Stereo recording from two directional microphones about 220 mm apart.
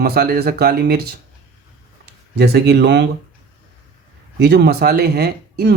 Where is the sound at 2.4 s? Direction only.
50° right (ahead or behind).